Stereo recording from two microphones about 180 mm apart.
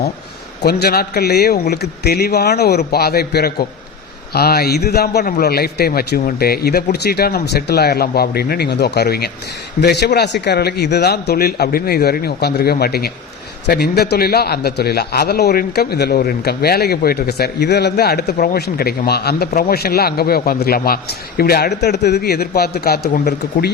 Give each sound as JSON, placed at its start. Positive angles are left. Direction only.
{"t": 0.6, "sound": "a man's voice", "side_deg": 60}